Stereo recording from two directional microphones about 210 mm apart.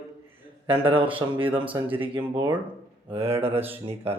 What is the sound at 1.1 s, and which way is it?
Speech, 25° right (ahead or behind).